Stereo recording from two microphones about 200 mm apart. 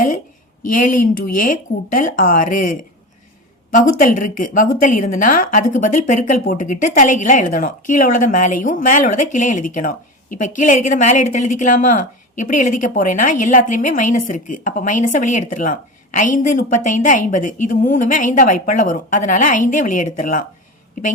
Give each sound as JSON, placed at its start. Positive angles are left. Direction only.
{"t": 0.7, "sound": "speech", "side_deg": 45}
{"t": 4.0, "sound": "a woman's voice", "side_deg": 40}